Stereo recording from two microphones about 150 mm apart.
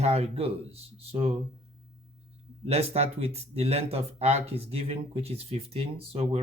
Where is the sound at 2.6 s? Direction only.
45° right (ahead or behind).